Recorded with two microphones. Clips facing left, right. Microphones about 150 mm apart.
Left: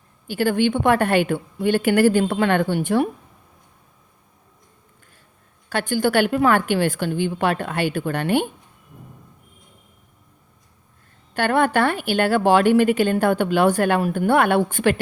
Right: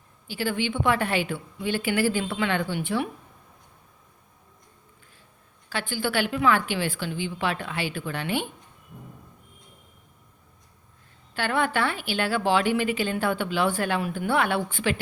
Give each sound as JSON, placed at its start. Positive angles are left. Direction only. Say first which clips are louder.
{"t": 0.3, "sound": "a woman's voice", "louder": "left 8 dB", "side_deg": 50}
{"t": 5.6, "sound": "a woman's voice", "louder": "left 8 dB", "side_deg": 45}
{"t": 11.3, "sound": "a woman's voice", "louder": "left 7 dB", "side_deg": 45}